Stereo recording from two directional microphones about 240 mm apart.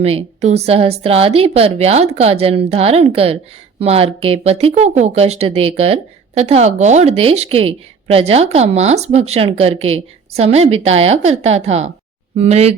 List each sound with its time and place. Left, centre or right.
0.0 s speech: right